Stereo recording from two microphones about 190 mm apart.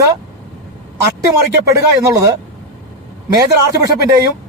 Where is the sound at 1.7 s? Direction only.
15° right (ahead or behind).